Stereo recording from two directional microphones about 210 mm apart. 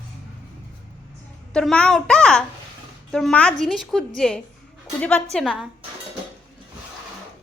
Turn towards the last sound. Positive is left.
turn(degrees=0)  # may be behind; listen again after turning